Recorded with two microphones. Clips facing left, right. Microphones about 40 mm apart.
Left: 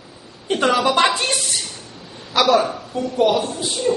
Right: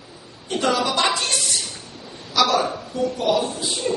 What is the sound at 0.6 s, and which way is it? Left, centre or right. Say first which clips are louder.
Speech: left 3 dB; left.